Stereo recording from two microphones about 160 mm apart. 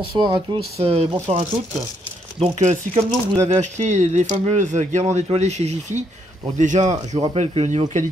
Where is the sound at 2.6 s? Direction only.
45° right (ahead or behind).